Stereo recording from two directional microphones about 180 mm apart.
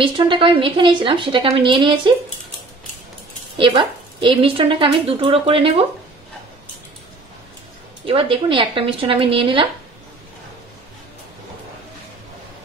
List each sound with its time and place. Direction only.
0.0 s a woman's voice: 30° right (ahead or behind)
3.5 s a woman's voice: 30° right (ahead or behind)
8.0 s a woman's voice: 30° right (ahead or behind)